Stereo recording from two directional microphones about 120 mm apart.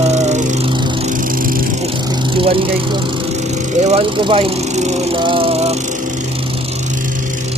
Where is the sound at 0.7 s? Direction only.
40° right (ahead or behind).